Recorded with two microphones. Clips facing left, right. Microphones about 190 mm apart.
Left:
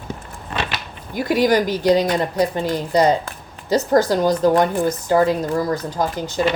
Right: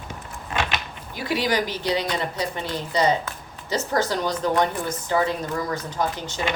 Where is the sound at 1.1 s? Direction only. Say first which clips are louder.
Left 7 dB; 45° left (ahead or behind).